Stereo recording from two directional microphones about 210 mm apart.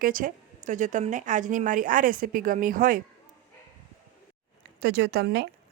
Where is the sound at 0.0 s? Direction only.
40° right (ahead or behind).